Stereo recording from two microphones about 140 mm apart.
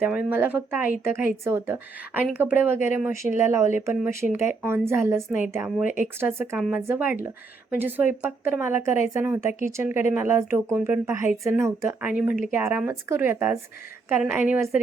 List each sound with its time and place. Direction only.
0.0 s speech: 10° right (ahead or behind)